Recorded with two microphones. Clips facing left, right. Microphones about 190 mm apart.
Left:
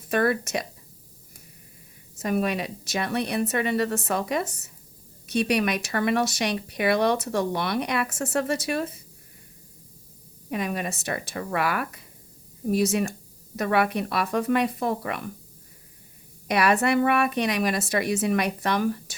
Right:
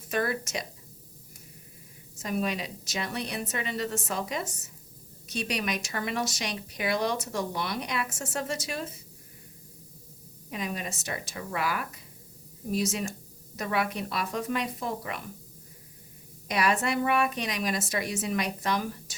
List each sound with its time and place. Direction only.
0.1 s speech: 60° left (ahead or behind)
2.1 s speech: 60° left (ahead or behind)
10.5 s speech: 60° left (ahead or behind)
16.5 s speech: 65° left (ahead or behind)